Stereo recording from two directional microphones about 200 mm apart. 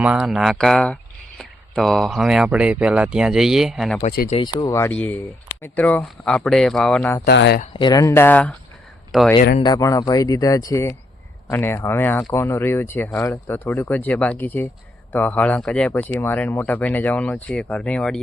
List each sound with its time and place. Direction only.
0.0 s speech: 5° right (ahead or behind)
4.3 s speech: 25° left (ahead or behind)
7.3 s speech: 55° left (ahead or behind)
7.6 s speech: 25° left (ahead or behind); by 8.5 s 10° left (ahead or behind)
9.6 s speech: 20° left (ahead or behind)